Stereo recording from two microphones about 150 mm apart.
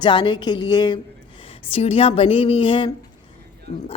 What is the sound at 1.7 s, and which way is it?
A woman's voice, 40° left (ahead or behind).